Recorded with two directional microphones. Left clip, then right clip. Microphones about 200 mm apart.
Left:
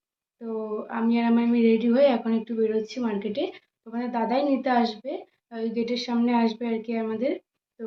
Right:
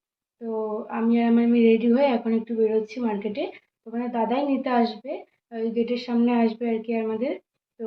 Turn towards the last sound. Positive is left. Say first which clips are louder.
# right 1 dB
turn(degrees=15)  # may be behind; listen again after turning